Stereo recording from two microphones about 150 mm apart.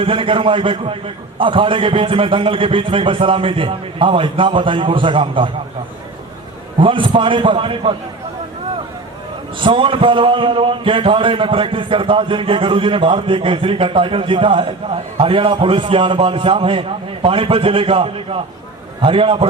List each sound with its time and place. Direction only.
0.0 s a man's voice: 35° right (ahead or behind)
6.7 s a man's voice: 35° right (ahead or behind)
9.6 s a man's voice: 35° right (ahead or behind)